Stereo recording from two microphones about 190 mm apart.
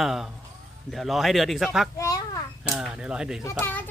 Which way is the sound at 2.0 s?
20° left (ahead or behind).